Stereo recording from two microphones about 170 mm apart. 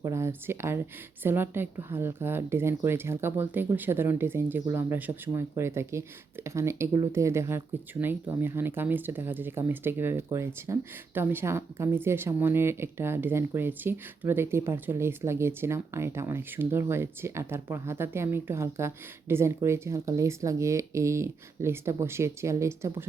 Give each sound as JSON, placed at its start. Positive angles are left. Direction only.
{"t": 0.0, "sound": "speech", "side_deg": -15}